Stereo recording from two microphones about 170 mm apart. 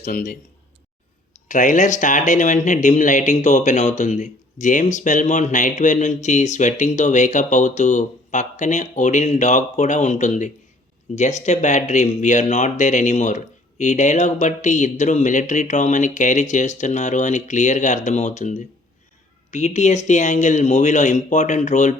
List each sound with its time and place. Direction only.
0.0 s a man's voice: 55° left (ahead or behind)
1.5 s speech: 50° left (ahead or behind)